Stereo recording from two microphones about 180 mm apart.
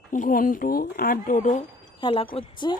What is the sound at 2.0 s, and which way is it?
Speech, 25° left (ahead or behind).